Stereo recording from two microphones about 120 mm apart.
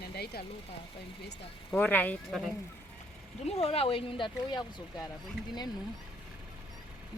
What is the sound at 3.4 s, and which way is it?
Speech, 60° left (ahead or behind).